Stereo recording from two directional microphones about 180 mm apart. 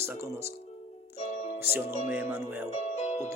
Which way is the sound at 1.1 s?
40° left (ahead or behind).